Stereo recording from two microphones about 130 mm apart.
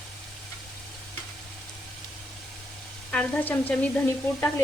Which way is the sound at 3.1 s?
10° left (ahead or behind).